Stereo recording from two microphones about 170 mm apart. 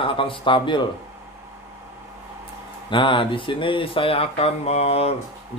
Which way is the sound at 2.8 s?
30° left (ahead or behind).